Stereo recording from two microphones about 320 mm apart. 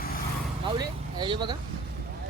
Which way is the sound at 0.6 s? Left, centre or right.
Centre.